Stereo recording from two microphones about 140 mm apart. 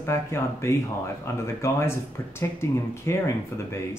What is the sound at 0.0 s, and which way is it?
Speech, 20° left (ahead or behind).